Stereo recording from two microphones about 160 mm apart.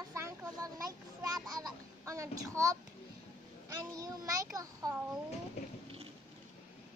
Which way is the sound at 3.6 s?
20° right (ahead or behind).